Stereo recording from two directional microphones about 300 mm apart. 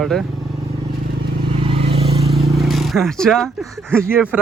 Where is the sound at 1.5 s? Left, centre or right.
Centre.